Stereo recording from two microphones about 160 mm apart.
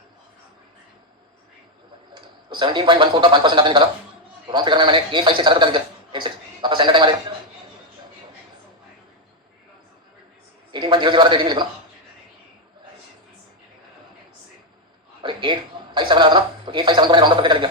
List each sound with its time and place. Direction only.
2.1 s a man's voice: 30° right (ahead or behind)
10.7 s a man's voice: 30° right (ahead or behind)
15.2 s a sound: 30° right (ahead or behind)
16.0 s a man's voice: 30° right (ahead or behind)